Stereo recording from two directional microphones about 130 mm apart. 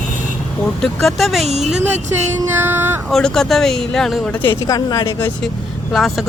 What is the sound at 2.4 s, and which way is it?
Music, 20° right (ahead or behind).